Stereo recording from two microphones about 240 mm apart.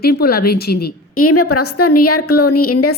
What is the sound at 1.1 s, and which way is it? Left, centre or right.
A woman's voice, left.